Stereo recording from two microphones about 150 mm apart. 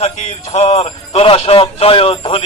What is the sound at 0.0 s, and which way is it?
Speech, 50° left (ahead or behind).